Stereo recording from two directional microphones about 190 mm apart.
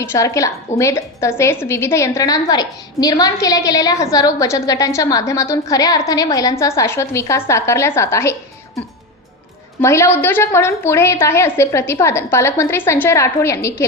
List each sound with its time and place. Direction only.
0.0 s a woman's voice: 15° left (ahead or behind)
9.8 s a woman's voice: 15° left (ahead or behind)